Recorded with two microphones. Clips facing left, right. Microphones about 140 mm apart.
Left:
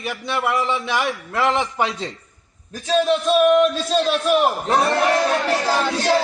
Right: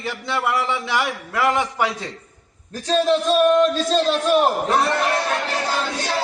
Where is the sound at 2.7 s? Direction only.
Centre (ahead or behind).